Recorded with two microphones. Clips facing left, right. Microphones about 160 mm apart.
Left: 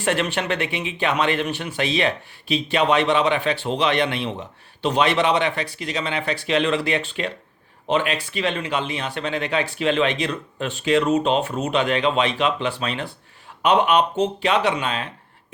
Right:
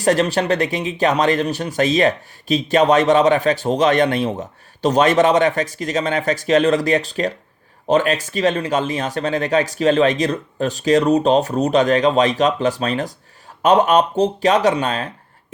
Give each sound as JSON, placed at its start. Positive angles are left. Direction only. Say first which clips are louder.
{"t": 0.0, "sound": "speech", "louder": "right 6 dB", "side_deg": -40}